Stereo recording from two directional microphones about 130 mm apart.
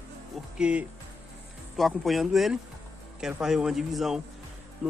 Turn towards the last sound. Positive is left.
turn(degrees=-10)  # may be behind; listen again after turning